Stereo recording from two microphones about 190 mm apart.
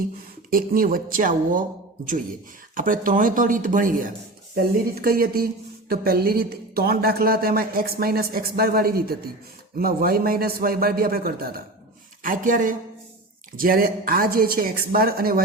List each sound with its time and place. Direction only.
0.5 s a woman's voice: 50° right (ahead or behind)
2.7 s a woman's voice: 45° right (ahead or behind)